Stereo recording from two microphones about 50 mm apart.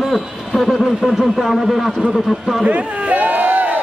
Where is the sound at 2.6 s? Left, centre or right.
Right.